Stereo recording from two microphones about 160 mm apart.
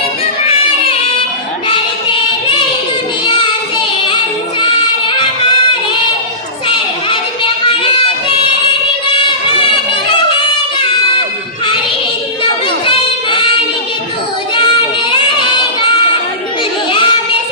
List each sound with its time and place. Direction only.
1.6 s a sound: 30° left (ahead or behind)
4.6 s music: 30° left (ahead or behind)
6.7 s child singing: 30° left (ahead or behind)
9.1 s music: 35° left (ahead or behind)
12.4 s a sound: 35° left (ahead or behind)
16.9 s child singing: 30° left (ahead or behind)